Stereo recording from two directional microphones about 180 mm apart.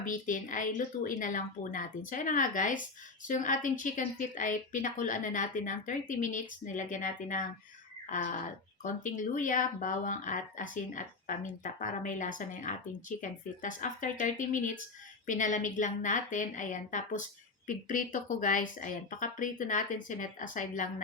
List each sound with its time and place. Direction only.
0.0 s speech: 45° left (ahead or behind)
8.8 s speech: 45° left (ahead or behind)